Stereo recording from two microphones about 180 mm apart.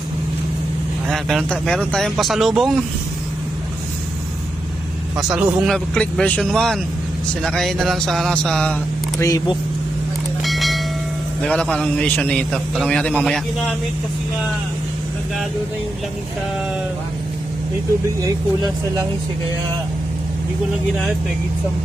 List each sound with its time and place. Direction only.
1.0 s speech: centre (ahead or behind)
5.3 s speech: 5° right (ahead or behind)
9.1 s speech: 20° left (ahead or behind)
10.4 s train: centre (ahead or behind)
11.4 s a man's voice: 5° left (ahead or behind)
18.2 s speech: 20° right (ahead or behind)